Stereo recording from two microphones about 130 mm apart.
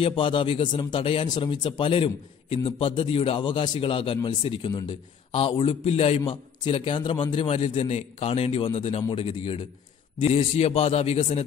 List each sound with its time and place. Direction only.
0.0 s a man's voice: 40° left (ahead or behind)